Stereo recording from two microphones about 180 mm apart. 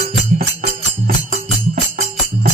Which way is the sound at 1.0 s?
45° right (ahead or behind).